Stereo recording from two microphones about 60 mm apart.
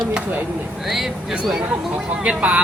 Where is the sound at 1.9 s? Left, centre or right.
Right.